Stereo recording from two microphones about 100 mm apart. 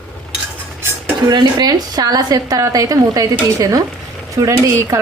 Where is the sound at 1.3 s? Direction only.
45° right (ahead or behind).